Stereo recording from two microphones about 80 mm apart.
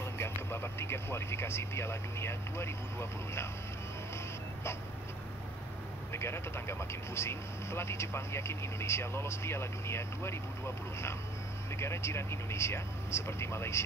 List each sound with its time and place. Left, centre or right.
0.2 s speech: left
6.1 s speech: left
11.7 s speech: left